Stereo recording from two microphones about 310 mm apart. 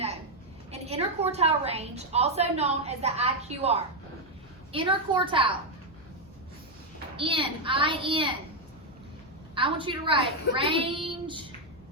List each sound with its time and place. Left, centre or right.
0.7 s a woman's voice: centre
7.2 s a woman's voice: centre
9.6 s a woman's voice: centre